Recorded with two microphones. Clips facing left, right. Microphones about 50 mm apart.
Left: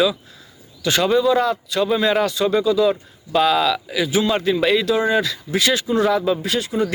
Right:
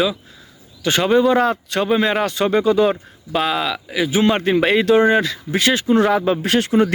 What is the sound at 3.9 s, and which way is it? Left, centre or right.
Speech, right.